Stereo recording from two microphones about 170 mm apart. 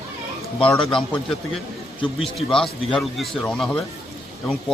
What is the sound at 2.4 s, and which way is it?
A man's voice, 5° left (ahead or behind).